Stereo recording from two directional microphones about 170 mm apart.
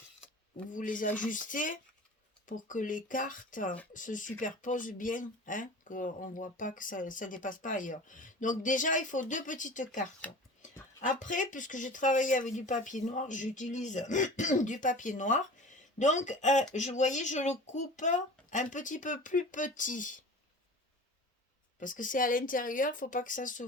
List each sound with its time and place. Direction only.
0.7 s speech: 50° left (ahead or behind)
21.8 s speech: 50° left (ahead or behind)